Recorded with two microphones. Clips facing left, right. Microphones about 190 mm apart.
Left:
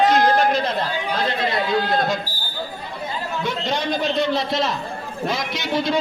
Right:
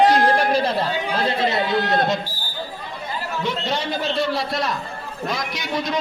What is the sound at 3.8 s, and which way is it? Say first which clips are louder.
A man's voice: left 2 dB; 15° left (ahead or behind).